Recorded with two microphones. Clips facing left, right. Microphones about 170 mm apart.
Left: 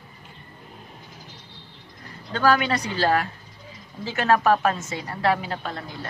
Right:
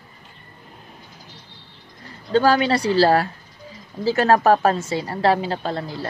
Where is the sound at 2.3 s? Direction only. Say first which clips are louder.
Right 4 dB; 30° right (ahead or behind).